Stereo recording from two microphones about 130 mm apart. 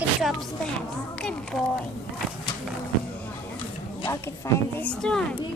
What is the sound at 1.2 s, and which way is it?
Speech, 5° left (ahead or behind).